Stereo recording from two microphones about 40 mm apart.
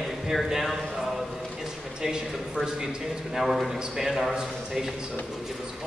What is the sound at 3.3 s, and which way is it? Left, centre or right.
Speech, centre.